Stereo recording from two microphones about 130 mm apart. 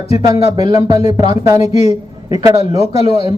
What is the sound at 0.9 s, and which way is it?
Speech, 50° left (ahead or behind).